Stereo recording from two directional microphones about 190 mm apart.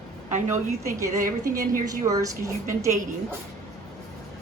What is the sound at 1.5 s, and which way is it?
Speech, 45° right (ahead or behind).